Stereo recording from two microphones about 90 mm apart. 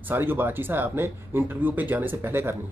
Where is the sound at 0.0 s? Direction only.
25° right (ahead or behind).